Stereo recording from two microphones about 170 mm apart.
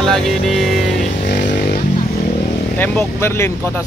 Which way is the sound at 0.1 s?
Centre (ahead or behind).